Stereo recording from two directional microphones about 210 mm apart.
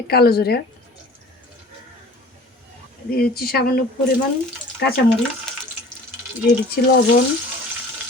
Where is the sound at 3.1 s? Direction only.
45° left (ahead or behind).